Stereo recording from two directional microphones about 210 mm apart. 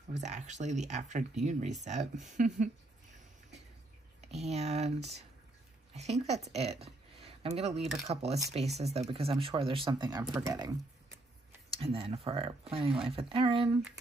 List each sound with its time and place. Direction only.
0.2 s speech: 35° right (ahead or behind)
4.2 s speech: 30° right (ahead or behind)
11.7 s speech: 25° right (ahead or behind)